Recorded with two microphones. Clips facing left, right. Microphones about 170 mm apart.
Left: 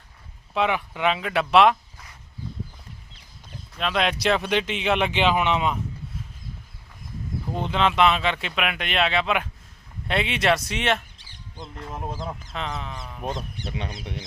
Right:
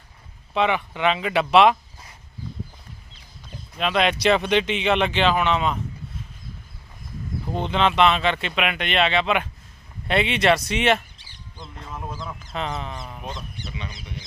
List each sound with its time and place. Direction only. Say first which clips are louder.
0.5 s speech: right 2 dB; 5° left (ahead or behind)
3.8 s speech: right 3 dB; centre (ahead or behind)
7.5 s speech: right 2 dB; 5° left (ahead or behind)
12.1 s speech: left 2 dB; 35° left (ahead or behind)
12.5 s speech: right 5 dB; centre (ahead or behind)
13.2 s speech: left 4 dB; 45° left (ahead or behind)
13.7 s speech: left 5 dB; 60° left (ahead or behind)